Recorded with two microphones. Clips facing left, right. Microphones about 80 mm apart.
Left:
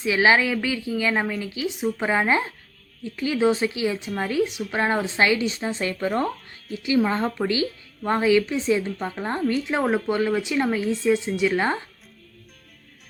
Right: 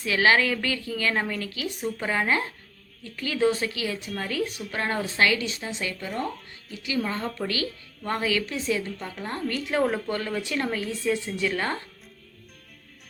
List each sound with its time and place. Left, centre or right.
0.0 s a woman's voice: centre; by 6.1 s left
6.8 s a woman's voice: left